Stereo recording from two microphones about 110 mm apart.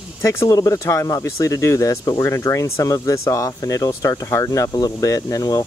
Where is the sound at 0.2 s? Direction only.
25° left (ahead or behind).